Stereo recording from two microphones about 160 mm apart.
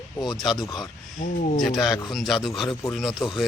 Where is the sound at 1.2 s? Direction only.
55° left (ahead or behind).